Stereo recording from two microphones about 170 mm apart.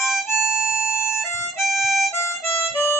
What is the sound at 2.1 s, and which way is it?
Harmonica, 15° left (ahead or behind).